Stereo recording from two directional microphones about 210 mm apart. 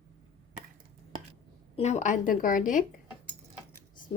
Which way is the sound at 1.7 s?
30° left (ahead or behind).